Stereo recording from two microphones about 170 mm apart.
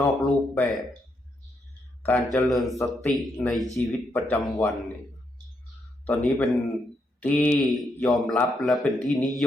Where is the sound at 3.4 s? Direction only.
Centre (ahead or behind).